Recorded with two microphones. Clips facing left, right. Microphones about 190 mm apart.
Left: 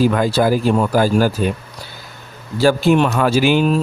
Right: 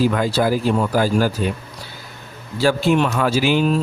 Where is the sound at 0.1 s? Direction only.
50° left (ahead or behind).